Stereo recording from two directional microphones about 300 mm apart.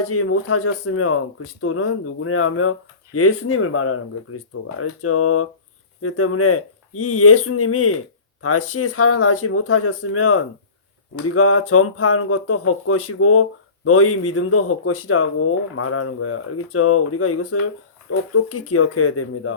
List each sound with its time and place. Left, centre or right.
0.1 s speech: left